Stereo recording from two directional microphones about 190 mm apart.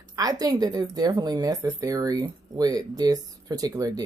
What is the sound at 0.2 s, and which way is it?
Speech, 20° right (ahead or behind).